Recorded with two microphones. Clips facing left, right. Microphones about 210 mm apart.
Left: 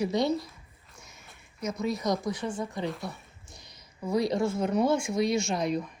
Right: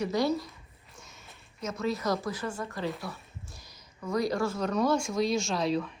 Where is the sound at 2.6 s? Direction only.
15° left (ahead or behind).